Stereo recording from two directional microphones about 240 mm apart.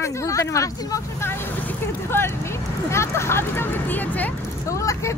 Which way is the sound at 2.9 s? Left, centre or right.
Centre.